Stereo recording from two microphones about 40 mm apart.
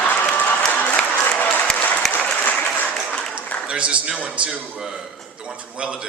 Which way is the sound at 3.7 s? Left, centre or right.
Right.